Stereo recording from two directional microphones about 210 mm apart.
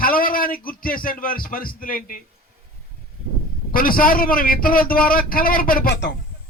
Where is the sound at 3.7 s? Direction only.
40° left (ahead or behind).